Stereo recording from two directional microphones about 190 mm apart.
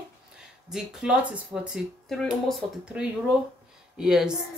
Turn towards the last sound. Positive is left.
turn(degrees=-5)  # may be behind; listen again after turning